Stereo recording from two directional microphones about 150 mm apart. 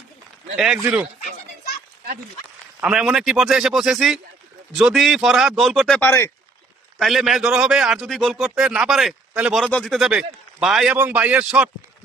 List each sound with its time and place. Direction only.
0.5 s a man's voice: centre (ahead or behind)
2.8 s a man's voice: 5° right (ahead or behind)
6.0 s speech: 15° left (ahead or behind)
7.0 s a man's voice: centre (ahead or behind)